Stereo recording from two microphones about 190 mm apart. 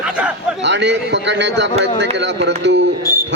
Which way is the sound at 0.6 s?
65° right (ahead or behind).